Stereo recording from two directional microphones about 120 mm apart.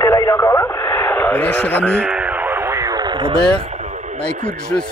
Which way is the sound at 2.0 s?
10° right (ahead or behind).